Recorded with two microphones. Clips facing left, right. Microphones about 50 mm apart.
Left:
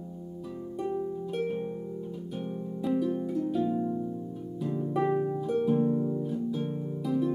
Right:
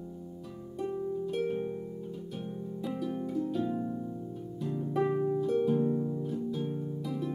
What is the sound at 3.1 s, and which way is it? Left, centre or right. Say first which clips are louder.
Harp: left 3 dB; centre.